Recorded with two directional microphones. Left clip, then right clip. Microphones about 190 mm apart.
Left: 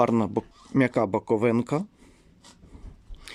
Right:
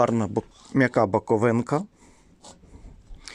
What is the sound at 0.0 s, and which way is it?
Speech, 20° left (ahead or behind).